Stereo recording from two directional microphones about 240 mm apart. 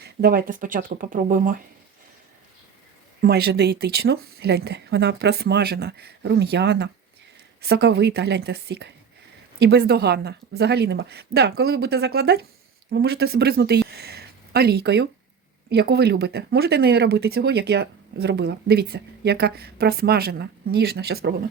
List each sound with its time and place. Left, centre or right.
0.0 s speech: right
3.2 s speech: right